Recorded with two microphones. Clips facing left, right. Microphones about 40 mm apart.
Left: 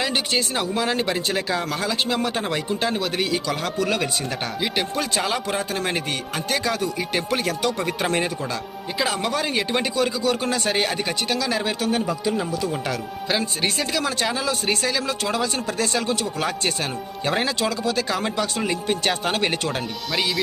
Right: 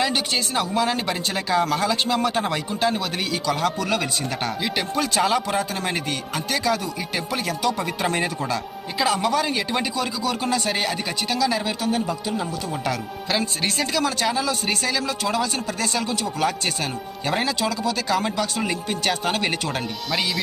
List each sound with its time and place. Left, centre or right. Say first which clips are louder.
0.1 s speech: even; centre
7.1 s speech: even; left
9.0 s speech: right 4 dB; left
12.9 s speech: even; centre
16.4 s speech: right 1 dB; centre
17.4 s speech: even; left
17.9 s speech: right 1 dB; centre